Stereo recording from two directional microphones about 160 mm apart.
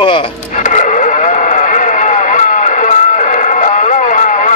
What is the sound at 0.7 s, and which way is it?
Vehicle, 50° left (ahead or behind).